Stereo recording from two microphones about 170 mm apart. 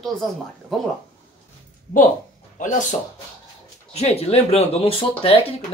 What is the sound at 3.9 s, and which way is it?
Speech, 35° left (ahead or behind).